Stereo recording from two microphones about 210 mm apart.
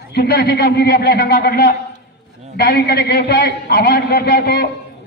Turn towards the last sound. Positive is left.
turn(degrees=50)  # may be behind; listen again after turning